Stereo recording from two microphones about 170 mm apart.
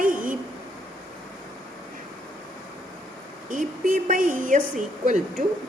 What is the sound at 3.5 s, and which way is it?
A woman's voice, 50° right (ahead or behind).